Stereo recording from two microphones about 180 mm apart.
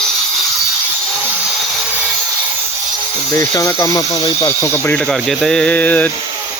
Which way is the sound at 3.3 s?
20° left (ahead or behind).